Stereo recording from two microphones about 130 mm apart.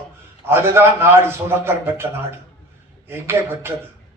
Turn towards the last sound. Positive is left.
turn(degrees=-20)  # may be behind; listen again after turning